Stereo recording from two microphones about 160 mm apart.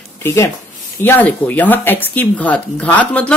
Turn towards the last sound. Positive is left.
turn(degrees=10)  # may be behind; listen again after turning